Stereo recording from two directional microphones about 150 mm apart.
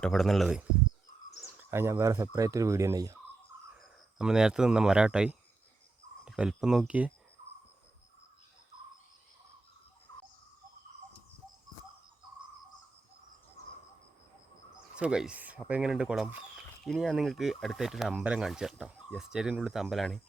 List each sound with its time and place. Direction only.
0.0 s speech: centre (ahead or behind); by 3.2 s 20° right (ahead or behind)
4.2 s speech: 5° right (ahead or behind)
14.9 s speech: 5° right (ahead or behind)